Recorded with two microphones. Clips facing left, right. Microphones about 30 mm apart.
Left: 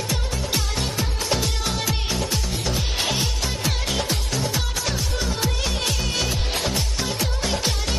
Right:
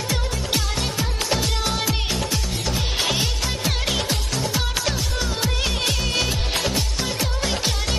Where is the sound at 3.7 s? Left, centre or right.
Centre.